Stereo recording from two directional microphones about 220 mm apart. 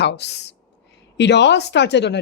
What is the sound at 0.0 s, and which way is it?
Speech, 50° left (ahead or behind).